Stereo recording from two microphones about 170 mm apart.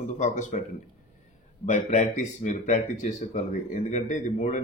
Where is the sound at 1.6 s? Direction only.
45° left (ahead or behind).